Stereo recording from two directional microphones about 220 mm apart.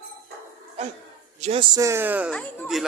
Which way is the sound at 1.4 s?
25° right (ahead or behind).